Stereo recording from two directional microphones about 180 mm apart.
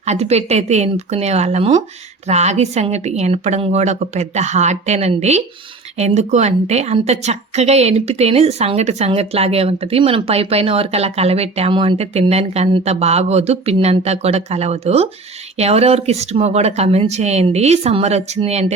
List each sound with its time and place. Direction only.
0.0 s a woman's voice: 35° right (ahead or behind)